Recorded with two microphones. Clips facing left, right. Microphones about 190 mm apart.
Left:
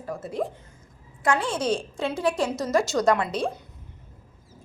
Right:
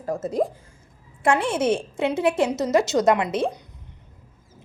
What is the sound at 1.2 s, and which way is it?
A woman's voice, 25° right (ahead or behind).